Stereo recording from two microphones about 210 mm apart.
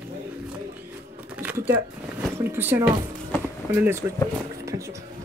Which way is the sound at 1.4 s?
10° right (ahead or behind).